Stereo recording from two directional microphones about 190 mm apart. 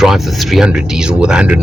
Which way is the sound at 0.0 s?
Centre (ahead or behind).